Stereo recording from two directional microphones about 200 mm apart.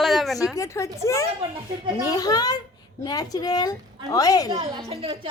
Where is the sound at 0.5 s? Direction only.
15° left (ahead or behind).